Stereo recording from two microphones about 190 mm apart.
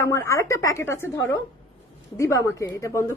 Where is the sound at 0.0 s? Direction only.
15° left (ahead or behind).